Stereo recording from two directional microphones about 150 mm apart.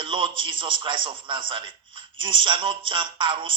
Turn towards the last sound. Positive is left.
turn(degrees=-35)  # may be behind; listen again after turning